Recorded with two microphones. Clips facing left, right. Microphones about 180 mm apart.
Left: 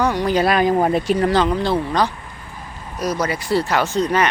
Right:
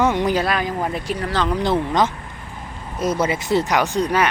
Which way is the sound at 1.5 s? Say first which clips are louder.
Even; 20° right (ahead or behind).